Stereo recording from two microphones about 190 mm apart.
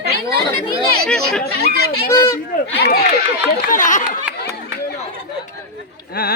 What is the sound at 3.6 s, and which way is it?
Speech, 45° left (ahead or behind).